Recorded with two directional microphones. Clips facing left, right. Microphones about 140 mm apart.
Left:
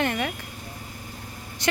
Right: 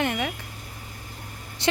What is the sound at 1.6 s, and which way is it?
Speech, 25° right (ahead or behind).